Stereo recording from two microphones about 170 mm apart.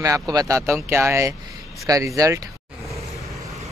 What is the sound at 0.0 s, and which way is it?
Speech, 20° right (ahead or behind).